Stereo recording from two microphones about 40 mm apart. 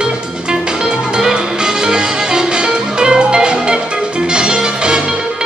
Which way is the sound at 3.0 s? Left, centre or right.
Right.